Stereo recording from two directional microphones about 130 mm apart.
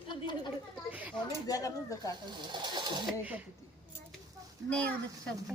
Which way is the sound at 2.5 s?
35° right (ahead or behind).